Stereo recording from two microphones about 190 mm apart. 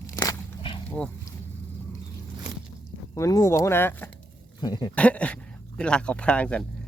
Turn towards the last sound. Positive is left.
turn(degrees=5)  # may be behind; listen again after turning